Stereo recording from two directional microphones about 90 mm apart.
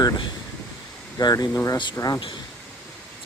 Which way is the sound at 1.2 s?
45° left (ahead or behind).